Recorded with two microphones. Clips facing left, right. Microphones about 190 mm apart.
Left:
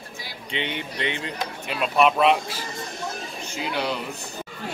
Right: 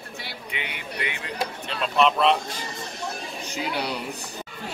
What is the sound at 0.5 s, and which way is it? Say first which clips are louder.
Speech: left 6 dB; 25° left (ahead or behind).